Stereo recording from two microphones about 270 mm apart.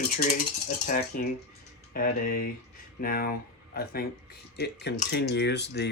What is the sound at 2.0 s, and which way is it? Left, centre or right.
Speech, left.